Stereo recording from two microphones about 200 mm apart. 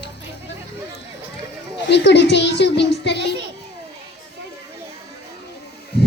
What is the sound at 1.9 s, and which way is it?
Music, 60° left (ahead or behind).